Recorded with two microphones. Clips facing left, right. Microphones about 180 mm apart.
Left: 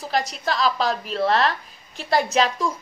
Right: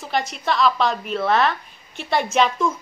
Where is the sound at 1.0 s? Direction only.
35° left (ahead or behind).